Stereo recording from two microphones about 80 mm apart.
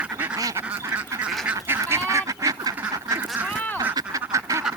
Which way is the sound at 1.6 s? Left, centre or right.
Right.